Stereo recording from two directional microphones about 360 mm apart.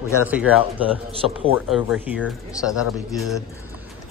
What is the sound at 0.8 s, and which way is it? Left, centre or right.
Speech, centre.